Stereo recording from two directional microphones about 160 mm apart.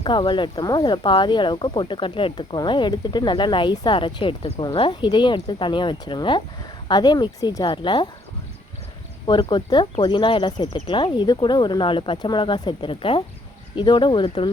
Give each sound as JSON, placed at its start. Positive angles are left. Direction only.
{"t": 0.0, "sound": "speech", "side_deg": 30}
{"t": 9.2, "sound": "speech", "side_deg": 30}